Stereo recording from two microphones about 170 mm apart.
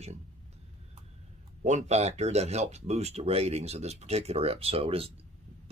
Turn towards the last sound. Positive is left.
turn(degrees=-35)  # may be behind; listen again after turning